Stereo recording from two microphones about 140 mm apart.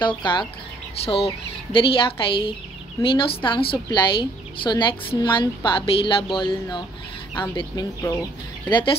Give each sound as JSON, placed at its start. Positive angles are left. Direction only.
{"t": 0.0, "sound": "a woman's voice", "side_deg": 35}
{"t": 0.9, "sound": "a woman's voice", "side_deg": 45}
{"t": 7.5, "sound": "a woman's voice", "side_deg": 25}